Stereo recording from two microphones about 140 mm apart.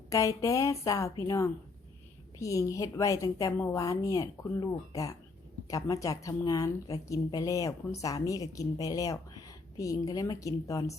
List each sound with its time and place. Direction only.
0.1 s a woman's voice: 25° left (ahead or behind)